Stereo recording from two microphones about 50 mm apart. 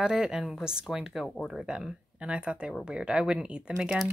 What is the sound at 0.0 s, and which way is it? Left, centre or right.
Speech, centre.